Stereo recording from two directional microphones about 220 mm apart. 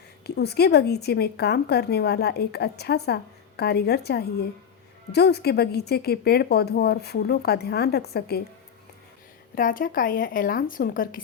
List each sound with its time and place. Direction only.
0.3 s speech: 45° left (ahead or behind)
9.6 s a woman's voice: 40° left (ahead or behind)